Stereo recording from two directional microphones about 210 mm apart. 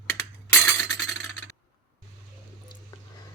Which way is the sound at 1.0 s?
Centre (ahead or behind).